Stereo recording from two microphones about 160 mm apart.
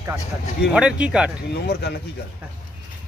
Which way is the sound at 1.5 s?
90° left.